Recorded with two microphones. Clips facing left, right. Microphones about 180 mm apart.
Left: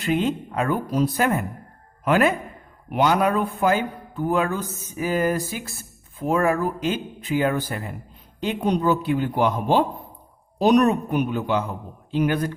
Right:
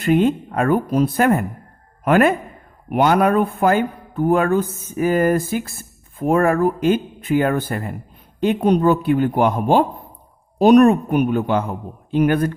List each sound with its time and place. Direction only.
0.0 s a man's voice: 55° right (ahead or behind)